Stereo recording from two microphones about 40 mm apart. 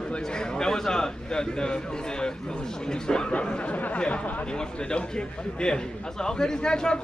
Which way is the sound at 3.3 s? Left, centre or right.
Left.